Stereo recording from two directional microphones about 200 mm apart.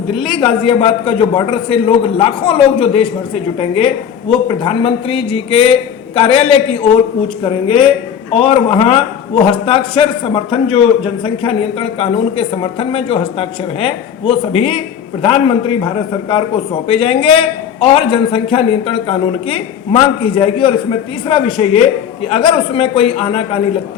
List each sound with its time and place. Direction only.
0.2 s a man's voice: 25° left (ahead or behind)
16.9 s a man's voice: 25° left (ahead or behind)